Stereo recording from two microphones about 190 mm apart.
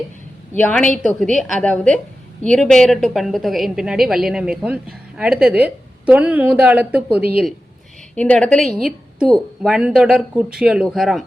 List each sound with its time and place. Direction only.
0.5 s a woman's voice: 5° left (ahead or behind)
8.1 s a woman's voice: 5° left (ahead or behind)